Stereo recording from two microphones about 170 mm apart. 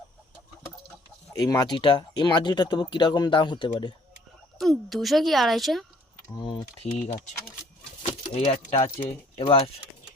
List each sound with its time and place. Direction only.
1.3 s speech: 20° left (ahead or behind)
4.5 s speech: centre (ahead or behind)
6.2 s speech: 25° left (ahead or behind)
8.0 s bird: 40° left (ahead or behind)
8.7 s speech: 45° left (ahead or behind)
9.0 s speech: 30° left (ahead or behind)